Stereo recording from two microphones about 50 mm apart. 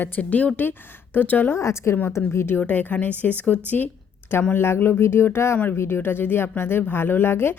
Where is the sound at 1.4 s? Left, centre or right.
Left.